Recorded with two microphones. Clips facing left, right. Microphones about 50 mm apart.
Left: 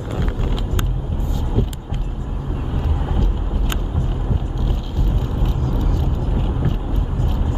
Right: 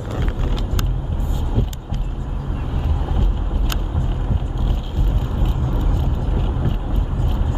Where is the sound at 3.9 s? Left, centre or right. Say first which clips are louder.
Left 1 dB; centre.